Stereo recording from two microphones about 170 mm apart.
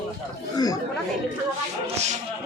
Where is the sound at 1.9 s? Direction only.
40° right (ahead or behind).